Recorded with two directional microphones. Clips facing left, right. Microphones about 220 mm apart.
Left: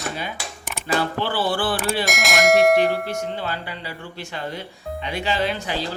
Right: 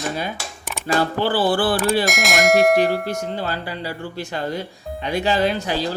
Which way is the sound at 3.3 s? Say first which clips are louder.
Right 3 dB; 40° right (ahead or behind).